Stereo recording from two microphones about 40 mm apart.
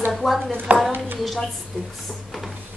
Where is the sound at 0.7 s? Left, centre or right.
Right.